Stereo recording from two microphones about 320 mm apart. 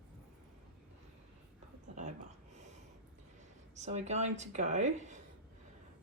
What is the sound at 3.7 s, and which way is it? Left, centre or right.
Speech, right.